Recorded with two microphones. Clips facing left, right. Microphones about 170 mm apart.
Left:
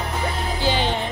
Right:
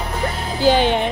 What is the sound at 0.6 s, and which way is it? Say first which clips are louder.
Speech: right 8 dB; 50° right (ahead or behind).